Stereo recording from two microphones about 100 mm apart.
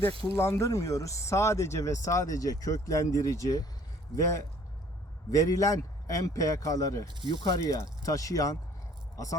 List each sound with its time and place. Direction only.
0.3 s speech: 25° left (ahead or behind)